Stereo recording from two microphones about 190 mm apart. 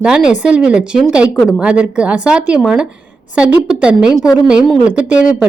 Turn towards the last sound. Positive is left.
turn(degrees=-5)  # may be behind; listen again after turning